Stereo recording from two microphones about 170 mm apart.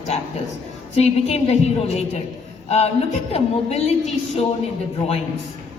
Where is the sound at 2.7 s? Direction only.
40° left (ahead or behind).